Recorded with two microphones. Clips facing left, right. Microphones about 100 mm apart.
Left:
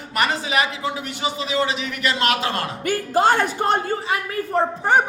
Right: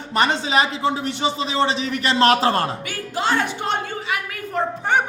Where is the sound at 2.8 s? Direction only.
45° left (ahead or behind).